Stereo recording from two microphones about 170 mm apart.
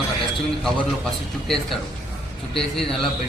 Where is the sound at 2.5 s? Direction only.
Centre (ahead or behind).